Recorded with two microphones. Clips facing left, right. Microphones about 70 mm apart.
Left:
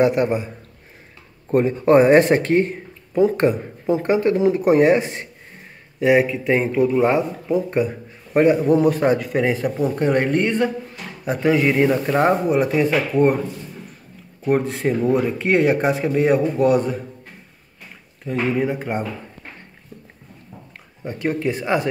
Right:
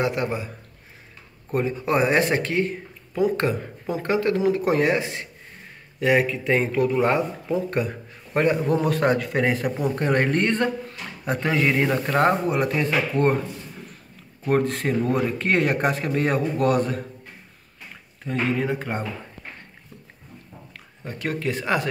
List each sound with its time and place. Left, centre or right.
0.0 s speech: left
1.5 s speech: left
5.9 s speech: centre
14.4 s speech: centre
18.6 s speech: centre
21.0 s speech: left